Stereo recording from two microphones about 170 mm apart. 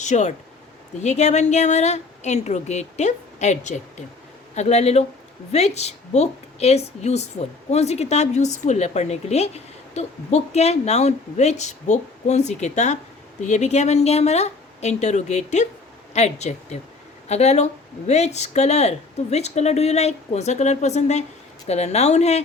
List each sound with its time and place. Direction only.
0.0 s a woman's voice: 45° left (ahead or behind)